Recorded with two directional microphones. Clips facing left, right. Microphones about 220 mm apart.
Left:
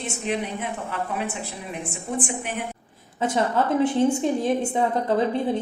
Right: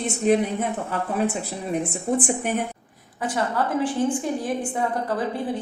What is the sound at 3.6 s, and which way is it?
Speech, 25° left (ahead or behind).